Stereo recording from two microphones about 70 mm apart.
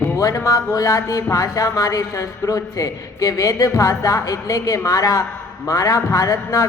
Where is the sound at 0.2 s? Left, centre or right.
Left.